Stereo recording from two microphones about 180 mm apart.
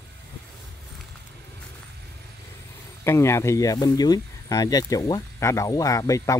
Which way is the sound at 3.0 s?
15° left (ahead or behind).